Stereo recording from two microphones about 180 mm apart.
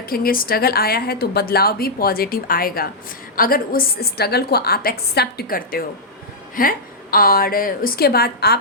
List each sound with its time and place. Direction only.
0.0 s a woman's voice: 55° left (ahead or behind)